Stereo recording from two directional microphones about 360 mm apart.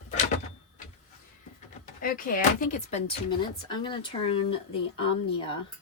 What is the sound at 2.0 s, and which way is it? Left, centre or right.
A woman's voice, left.